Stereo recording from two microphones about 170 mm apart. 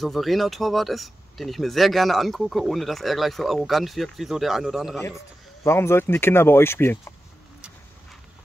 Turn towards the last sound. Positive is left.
turn(degrees=15)  # may be behind; listen again after turning